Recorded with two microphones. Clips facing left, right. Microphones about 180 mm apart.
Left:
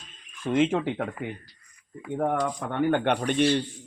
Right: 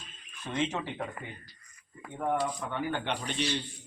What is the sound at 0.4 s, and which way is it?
Speech, 55° left (ahead or behind).